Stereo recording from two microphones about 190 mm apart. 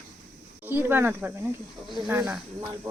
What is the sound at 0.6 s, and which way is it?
Speech, 10° right (ahead or behind).